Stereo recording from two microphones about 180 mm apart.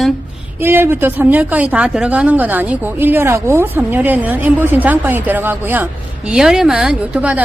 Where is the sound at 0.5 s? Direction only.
10° right (ahead or behind).